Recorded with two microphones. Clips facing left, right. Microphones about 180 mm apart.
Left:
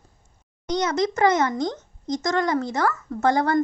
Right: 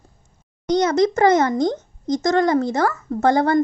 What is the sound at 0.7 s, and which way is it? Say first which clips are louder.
A child's voice: right 6 dB; 35° right (ahead or behind).